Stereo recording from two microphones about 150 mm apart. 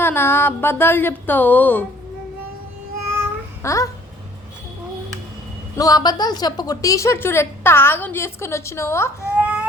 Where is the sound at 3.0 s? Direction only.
15° right (ahead or behind).